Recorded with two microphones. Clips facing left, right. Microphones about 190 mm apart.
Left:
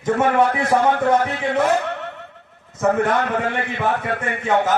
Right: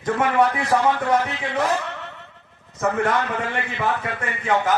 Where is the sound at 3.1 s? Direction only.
55° left (ahead or behind).